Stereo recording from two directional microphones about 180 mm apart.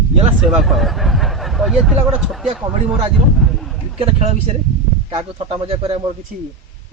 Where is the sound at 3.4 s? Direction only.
Centre (ahead or behind).